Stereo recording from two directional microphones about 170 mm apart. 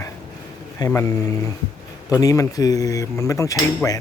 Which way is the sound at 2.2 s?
20° left (ahead or behind).